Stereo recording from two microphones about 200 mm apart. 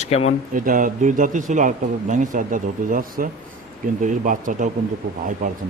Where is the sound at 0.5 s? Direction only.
40° right (ahead or behind).